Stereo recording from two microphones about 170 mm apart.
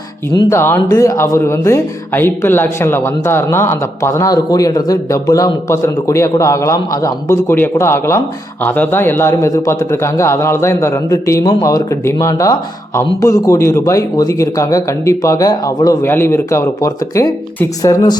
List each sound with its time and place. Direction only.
0.5 s a man's voice: 15° left (ahead or behind)